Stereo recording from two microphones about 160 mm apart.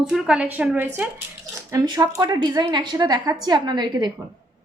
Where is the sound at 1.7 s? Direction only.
25° right (ahead or behind).